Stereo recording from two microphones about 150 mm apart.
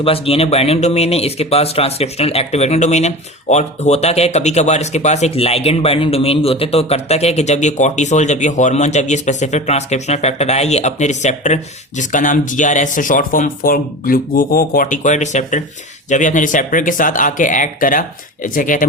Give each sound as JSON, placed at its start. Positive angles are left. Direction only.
{"t": 0.0, "sound": "speech", "side_deg": 40}